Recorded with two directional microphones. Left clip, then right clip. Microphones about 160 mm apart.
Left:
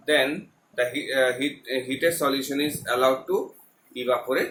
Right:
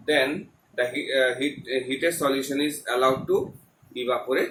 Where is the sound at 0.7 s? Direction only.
30° left (ahead or behind).